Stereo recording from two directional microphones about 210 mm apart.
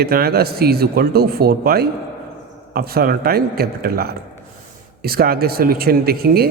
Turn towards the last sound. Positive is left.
turn(degrees=-45)  # may be behind; listen again after turning